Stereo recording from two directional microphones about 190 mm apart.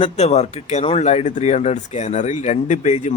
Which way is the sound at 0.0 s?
35° left (ahead or behind).